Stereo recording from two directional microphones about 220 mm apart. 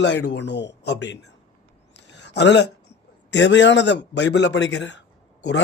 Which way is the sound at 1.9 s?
50° left (ahead or behind).